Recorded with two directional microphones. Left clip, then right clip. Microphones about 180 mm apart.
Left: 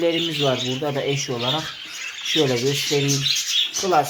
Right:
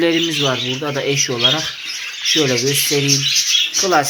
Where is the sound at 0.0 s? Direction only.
10° right (ahead or behind).